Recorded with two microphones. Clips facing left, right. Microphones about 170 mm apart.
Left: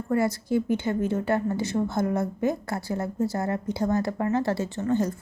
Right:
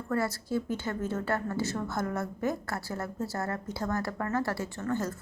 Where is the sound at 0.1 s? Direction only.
15° left (ahead or behind).